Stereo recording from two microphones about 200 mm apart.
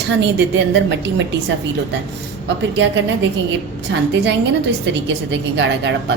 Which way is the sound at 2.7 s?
65° right (ahead or behind).